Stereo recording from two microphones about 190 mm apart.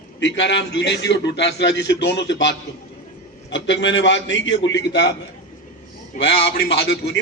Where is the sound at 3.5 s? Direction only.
70° left (ahead or behind).